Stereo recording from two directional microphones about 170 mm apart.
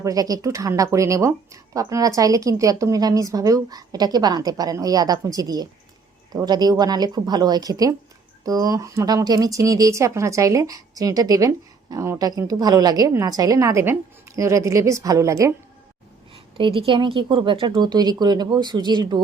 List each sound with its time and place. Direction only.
0.0 s a woman's voice: 20° right (ahead or behind)
16.3 s a woman's voice: 30° right (ahead or behind)